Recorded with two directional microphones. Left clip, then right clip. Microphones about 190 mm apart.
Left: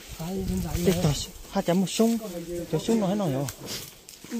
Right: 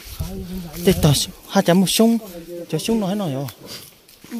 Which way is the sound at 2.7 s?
30° right (ahead or behind).